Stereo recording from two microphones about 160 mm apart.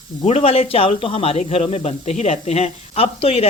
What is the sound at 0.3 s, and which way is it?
Speech, 40° left (ahead or behind).